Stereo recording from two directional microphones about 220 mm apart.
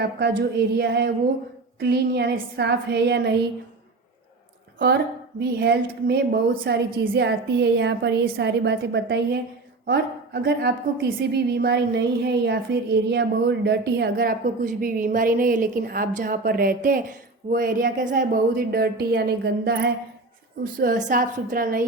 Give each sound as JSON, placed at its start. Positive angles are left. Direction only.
{"t": 0.0, "sound": "a woman's voice", "side_deg": -50}
{"t": 5.4, "sound": "a woman's voice", "side_deg": -50}